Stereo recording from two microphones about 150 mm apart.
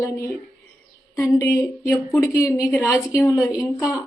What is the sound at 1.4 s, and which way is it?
Speech, 20° left (ahead or behind).